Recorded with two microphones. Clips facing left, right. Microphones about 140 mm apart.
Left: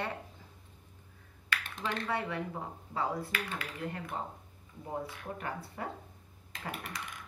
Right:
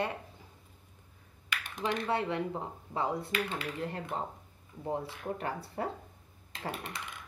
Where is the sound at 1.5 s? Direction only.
15° right (ahead or behind).